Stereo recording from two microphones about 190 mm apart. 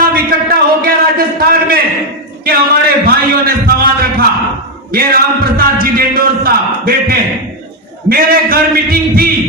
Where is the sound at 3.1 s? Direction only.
55° right (ahead or behind).